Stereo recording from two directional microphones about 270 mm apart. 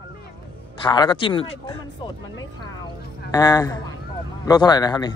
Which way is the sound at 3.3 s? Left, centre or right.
Centre.